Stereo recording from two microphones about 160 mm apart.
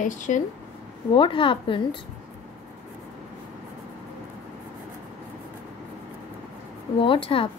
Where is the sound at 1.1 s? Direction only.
30° left (ahead or behind).